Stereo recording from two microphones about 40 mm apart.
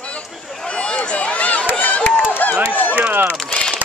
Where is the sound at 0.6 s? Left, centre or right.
Left.